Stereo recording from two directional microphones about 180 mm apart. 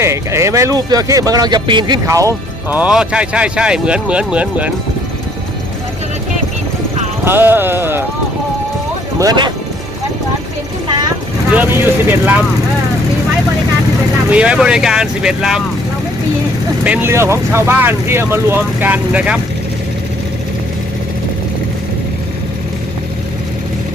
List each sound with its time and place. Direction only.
0.0 s speech: 15° right (ahead or behind)
7.3 s speech: 10° right (ahead or behind)
9.1 s speech: 20° right (ahead or behind)
11.5 s speech: 10° right (ahead or behind)
14.3 s speech: 5° right (ahead or behind)
16.8 s speech: 10° right (ahead or behind)